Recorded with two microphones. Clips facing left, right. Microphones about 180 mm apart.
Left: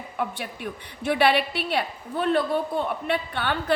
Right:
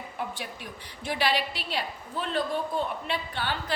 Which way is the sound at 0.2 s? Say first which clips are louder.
Left 6 dB; 60° left (ahead or behind).